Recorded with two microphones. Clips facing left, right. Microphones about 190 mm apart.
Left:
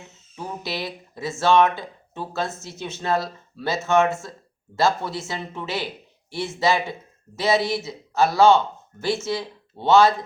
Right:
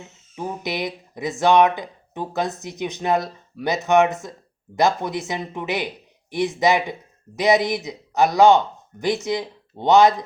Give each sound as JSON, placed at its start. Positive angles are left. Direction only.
{"t": 0.3, "sound": "speech", "side_deg": -15}